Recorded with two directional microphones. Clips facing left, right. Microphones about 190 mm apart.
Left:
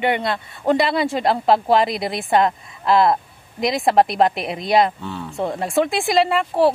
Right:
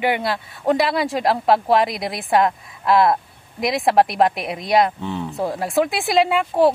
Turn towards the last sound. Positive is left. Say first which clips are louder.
# right 1 dB
turn(degrees=0)  # may be behind; listen again after turning